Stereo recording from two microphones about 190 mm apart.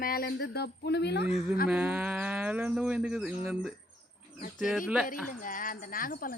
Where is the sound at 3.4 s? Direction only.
Centre (ahead or behind).